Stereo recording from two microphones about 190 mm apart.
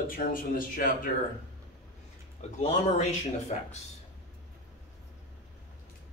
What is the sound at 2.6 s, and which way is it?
Speech, 35° left (ahead or behind).